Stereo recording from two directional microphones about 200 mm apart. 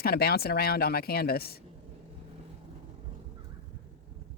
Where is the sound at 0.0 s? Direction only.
50° left (ahead or behind).